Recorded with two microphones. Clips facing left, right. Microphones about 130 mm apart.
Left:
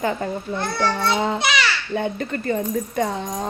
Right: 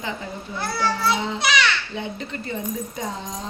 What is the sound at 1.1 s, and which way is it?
Speech, 50° left (ahead or behind).